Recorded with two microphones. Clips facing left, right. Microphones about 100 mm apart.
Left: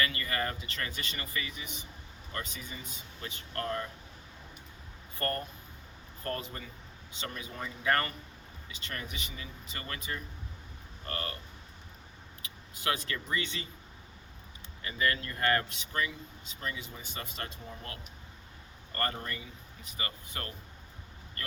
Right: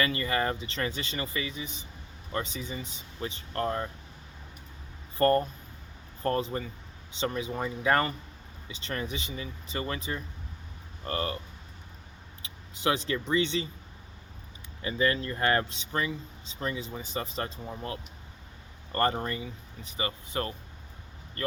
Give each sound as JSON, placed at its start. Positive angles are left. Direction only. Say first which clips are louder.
{"t": 0.0, "sound": "speech", "louder": "right 5 dB", "side_deg": -25}
{"t": 5.1, "sound": "speech", "louder": "right 11 dB", "side_deg": -30}
{"t": 12.4, "sound": "speech", "louder": "right 10 dB", "side_deg": -25}
{"t": 14.8, "sound": "speech", "louder": "right 5 dB", "side_deg": -25}